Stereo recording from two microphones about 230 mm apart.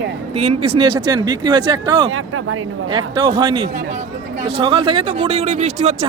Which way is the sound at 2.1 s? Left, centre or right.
Right.